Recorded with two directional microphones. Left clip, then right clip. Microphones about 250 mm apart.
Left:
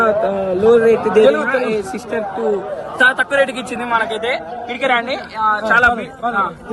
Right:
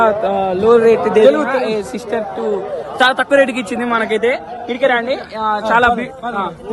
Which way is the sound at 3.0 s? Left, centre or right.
Right.